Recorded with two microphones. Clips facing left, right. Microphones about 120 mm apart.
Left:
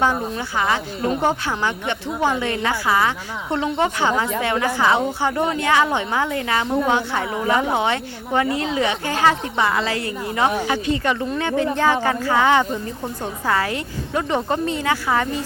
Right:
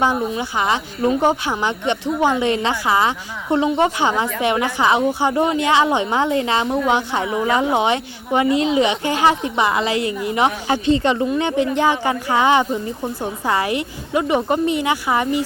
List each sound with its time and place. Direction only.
0.0 s a woman's voice: 15° right (ahead or behind)